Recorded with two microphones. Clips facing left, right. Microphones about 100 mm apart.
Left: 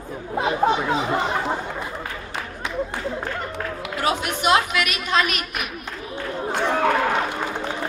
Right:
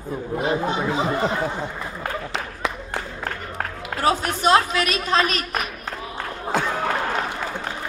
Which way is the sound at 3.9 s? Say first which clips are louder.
Right 3 dB; 35° right (ahead or behind).